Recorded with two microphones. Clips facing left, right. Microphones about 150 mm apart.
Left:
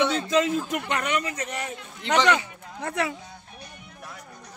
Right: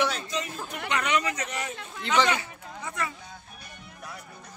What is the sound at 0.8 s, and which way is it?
A man's voice, 50° left (ahead or behind).